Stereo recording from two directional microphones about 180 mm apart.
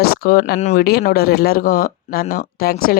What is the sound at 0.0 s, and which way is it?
Speech, 60° left (ahead or behind).